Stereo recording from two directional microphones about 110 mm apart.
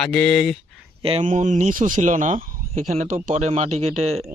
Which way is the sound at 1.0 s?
60° right (ahead or behind).